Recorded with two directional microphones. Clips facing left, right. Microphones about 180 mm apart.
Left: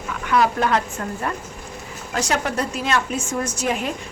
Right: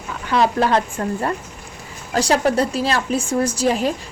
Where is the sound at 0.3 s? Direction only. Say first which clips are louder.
Right 2 dB; 30° right (ahead or behind).